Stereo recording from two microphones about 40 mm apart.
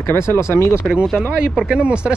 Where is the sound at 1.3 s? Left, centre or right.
Right.